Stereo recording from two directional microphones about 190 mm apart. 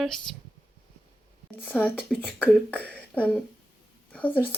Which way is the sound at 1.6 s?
5° left (ahead or behind).